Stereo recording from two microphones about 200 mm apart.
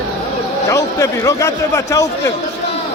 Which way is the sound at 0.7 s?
15° left (ahead or behind).